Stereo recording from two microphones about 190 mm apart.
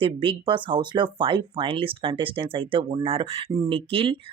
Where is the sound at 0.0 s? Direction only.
25° right (ahead or behind).